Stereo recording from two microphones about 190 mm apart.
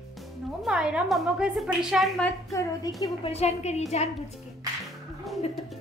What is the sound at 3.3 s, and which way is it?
Speech, 35° left (ahead or behind).